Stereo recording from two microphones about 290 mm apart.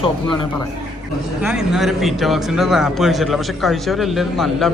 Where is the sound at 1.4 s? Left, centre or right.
Centre.